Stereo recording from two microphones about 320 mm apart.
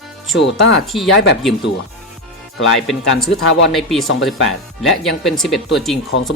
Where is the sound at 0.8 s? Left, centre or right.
Centre.